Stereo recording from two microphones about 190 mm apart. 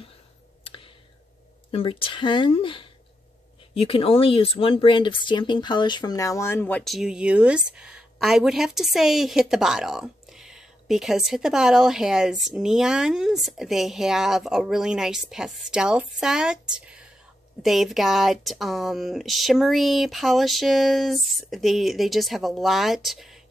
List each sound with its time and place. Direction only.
1.7 s speech: 30° left (ahead or behind); by 23.4 s centre (ahead or behind)